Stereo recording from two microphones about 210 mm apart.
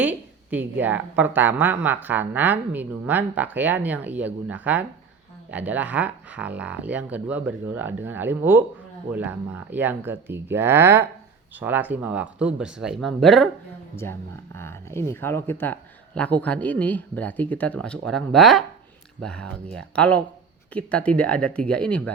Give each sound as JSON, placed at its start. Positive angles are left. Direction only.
{"t": 0.0, "sound": "a woman's voice", "side_deg": -10}
{"t": 13.9, "sound": "speech", "side_deg": 10}